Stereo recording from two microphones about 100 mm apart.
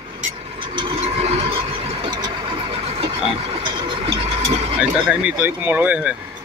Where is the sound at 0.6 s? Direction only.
60° right (ahead or behind); by 2.0 s 75° right (ahead or behind).